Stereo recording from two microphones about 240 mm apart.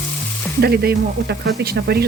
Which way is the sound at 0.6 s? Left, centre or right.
Right.